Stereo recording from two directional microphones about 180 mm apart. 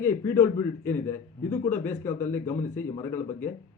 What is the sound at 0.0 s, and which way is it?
A man's voice, 15° left (ahead or behind).